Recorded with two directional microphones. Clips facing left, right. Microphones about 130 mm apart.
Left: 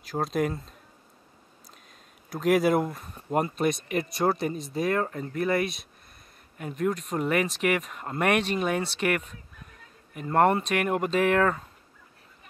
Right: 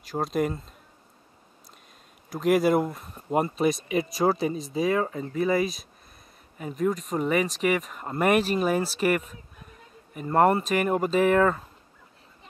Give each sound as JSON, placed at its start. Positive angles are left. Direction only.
{"t": 0.0, "sound": "speech", "side_deg": 0}
{"t": 2.2, "sound": "speech", "side_deg": 0}